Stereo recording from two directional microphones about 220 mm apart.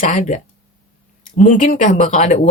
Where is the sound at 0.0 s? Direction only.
35° left (ahead or behind).